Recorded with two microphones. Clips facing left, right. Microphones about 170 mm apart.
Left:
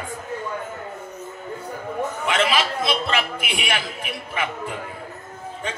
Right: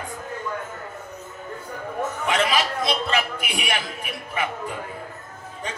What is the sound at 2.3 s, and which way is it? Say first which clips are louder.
A woman's voice: left 1 dB; 40° right (ahead or behind).